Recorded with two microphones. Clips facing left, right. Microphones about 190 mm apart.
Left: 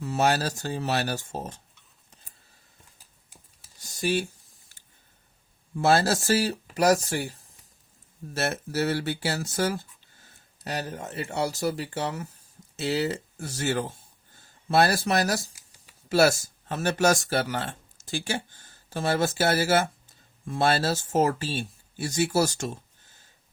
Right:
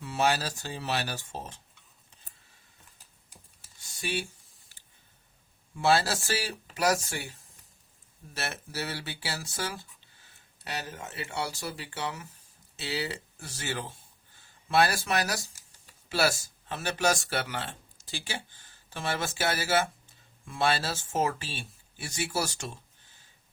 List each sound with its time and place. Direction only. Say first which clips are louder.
0.0 s speech: left 4 dB; 45° left (ahead or behind)
3.8 s computer keyboard: left 7 dB; 40° left (ahead or behind)
5.7 s speech: left 4 dB; 45° left (ahead or behind)